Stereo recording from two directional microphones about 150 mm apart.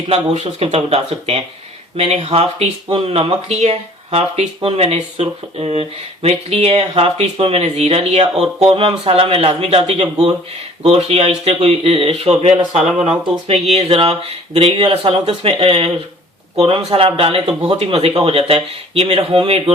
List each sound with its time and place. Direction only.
0.1 s speech: 45° right (ahead or behind)